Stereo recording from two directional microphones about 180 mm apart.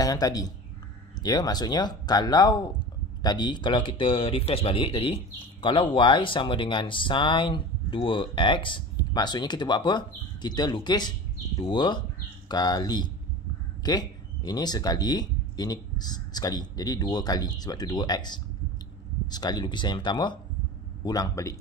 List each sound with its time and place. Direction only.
0.0 s speech: 20° left (ahead or behind)